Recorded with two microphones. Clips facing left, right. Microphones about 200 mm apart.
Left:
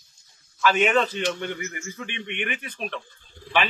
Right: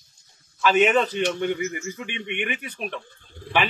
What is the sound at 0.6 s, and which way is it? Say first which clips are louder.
A man's voice: right 2 dB; 15° right (ahead or behind).